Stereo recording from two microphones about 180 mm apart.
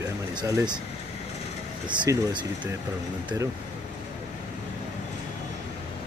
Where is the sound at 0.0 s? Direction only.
20° right (ahead or behind).